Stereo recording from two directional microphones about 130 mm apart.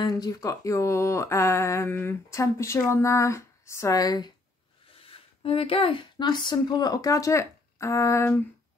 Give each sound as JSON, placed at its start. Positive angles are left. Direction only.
{"t": 0.0, "sound": "speech", "side_deg": 30}
{"t": 5.0, "sound": "speech", "side_deg": 45}